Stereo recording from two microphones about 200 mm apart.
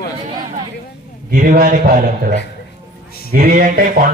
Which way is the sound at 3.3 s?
45° right (ahead or behind).